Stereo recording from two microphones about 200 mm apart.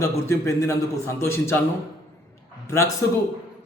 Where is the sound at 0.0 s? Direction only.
15° left (ahead or behind).